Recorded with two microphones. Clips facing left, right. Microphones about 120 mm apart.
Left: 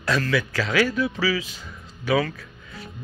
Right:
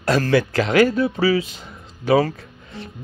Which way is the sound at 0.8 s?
30° right (ahead or behind).